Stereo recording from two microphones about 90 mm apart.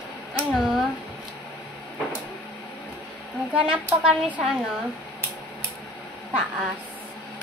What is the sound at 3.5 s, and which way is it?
Speech, 10° right (ahead or behind).